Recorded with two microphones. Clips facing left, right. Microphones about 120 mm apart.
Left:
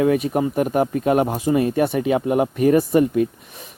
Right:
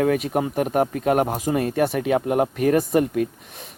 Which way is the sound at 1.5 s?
35° right (ahead or behind).